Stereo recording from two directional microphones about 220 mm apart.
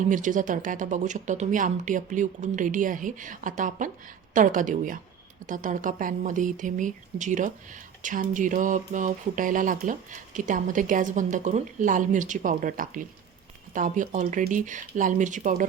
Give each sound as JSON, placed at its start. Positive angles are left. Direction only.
{"t": 0.1, "sound": "speech", "side_deg": -35}